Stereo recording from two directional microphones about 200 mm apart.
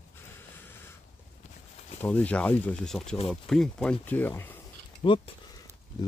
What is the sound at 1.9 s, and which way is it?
Speech, 10° left (ahead or behind).